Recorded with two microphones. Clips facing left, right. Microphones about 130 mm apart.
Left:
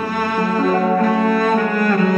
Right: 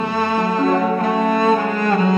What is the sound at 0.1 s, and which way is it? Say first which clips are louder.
Music: left 1 dB; 25° right (ahead or behind).